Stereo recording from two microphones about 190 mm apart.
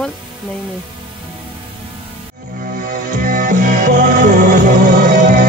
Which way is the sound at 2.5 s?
45° right (ahead or behind).